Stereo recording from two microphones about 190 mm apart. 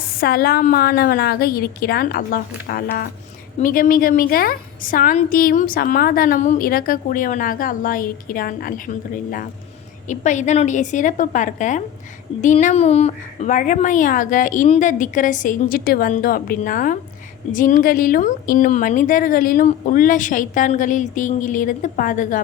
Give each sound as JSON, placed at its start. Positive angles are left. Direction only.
{"t": 0.2, "sound": "a woman's voice", "side_deg": 50}